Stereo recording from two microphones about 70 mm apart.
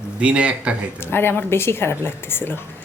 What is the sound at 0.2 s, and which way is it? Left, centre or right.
Speech, centre.